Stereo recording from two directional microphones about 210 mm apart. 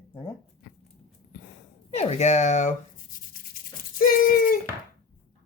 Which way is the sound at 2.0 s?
30° left (ahead or behind).